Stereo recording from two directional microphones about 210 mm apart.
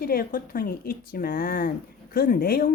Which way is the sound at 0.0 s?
45° left (ahead or behind).